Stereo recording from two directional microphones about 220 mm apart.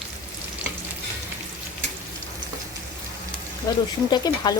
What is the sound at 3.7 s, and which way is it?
Frying, 15° left (ahead or behind).